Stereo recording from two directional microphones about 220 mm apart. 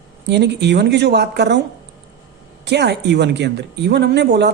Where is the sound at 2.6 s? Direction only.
50° right (ahead or behind).